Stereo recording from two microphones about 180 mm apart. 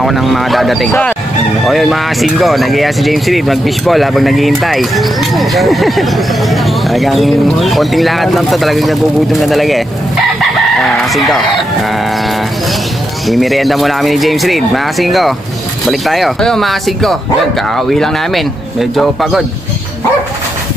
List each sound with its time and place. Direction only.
0.0 s speech: centre (ahead or behind)
10.8 s chicken: centre (ahead or behind)
13.3 s speech: centre (ahead or behind)